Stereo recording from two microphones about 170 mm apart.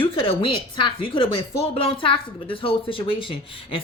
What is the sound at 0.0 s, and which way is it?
A woman's voice, 30° left (ahead or behind).